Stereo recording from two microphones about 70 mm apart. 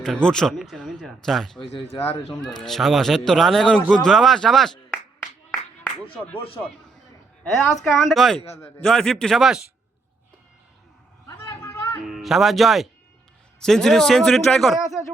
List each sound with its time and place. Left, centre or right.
0.0 s a man's voice: centre
7.5 s a man's voice: centre
11.3 s a sound: left
12.0 s a man's voice: centre